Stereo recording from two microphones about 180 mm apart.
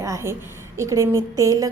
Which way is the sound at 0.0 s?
15° right (ahead or behind).